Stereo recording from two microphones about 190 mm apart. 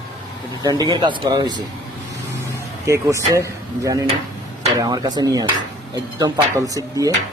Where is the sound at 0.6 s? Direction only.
20° right (ahead or behind).